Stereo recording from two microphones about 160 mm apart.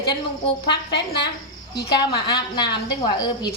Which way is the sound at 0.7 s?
90° left.